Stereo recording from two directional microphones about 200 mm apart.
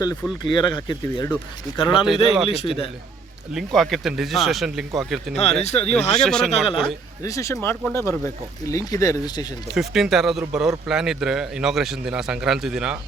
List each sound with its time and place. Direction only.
0.0 s speech: 20° left (ahead or behind)
3.5 s speech: centre (ahead or behind)
5.4 s speech: 30° left (ahead or behind)
6.1 s speech: 5° left (ahead or behind)
6.5 s speech: 30° left (ahead or behind)
7.2 s speech: 15° left (ahead or behind)
9.7 s speech: centre (ahead or behind)